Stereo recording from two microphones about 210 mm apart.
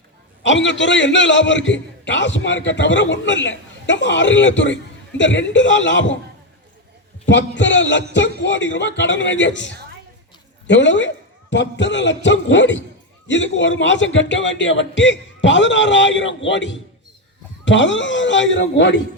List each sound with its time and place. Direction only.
0.4 s a man's voice: 60° left (ahead or behind)
7.3 s a man's voice: 60° left (ahead or behind)
10.7 s a man's voice: 60° left (ahead or behind)